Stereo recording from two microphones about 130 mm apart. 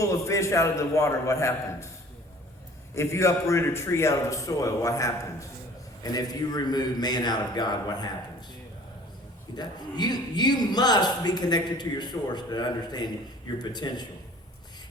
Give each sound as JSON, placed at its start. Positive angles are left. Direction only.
{"t": 0.0, "sound": "a man's voice", "side_deg": 25}
{"t": 2.9, "sound": "a man's voice", "side_deg": 20}
{"t": 9.6, "sound": "a man's voice", "side_deg": 35}